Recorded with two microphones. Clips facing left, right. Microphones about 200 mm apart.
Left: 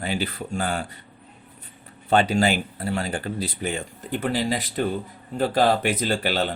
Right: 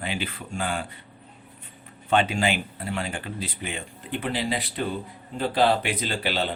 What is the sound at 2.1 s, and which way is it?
Speech, 40° left (ahead or behind).